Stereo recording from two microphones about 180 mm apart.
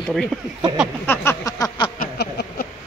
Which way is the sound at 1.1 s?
15° left (ahead or behind).